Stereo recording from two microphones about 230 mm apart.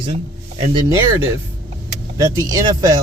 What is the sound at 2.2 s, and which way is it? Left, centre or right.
Speech, centre.